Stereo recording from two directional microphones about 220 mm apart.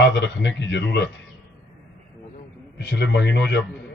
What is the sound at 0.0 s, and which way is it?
A man's voice, 50° left (ahead or behind).